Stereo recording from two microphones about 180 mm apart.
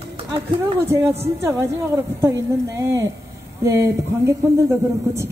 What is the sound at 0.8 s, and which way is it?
Speech, 15° right (ahead or behind).